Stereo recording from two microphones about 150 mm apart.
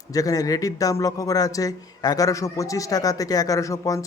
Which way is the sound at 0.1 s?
25° left (ahead or behind).